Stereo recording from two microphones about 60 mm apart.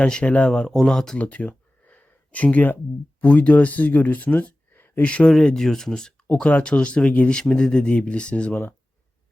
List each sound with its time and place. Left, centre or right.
0.0 s speech: centre
1.2 s a sound: left
3.2 s speech: left
5.0 s speech: centre
5.3 s speech: centre